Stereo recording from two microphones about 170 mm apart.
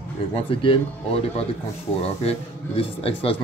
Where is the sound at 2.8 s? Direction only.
35° left (ahead or behind).